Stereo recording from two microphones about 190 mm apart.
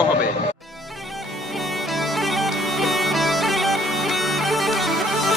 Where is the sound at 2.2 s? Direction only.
Centre (ahead or behind).